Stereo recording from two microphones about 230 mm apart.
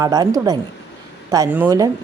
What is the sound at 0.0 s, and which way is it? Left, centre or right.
Speech, centre.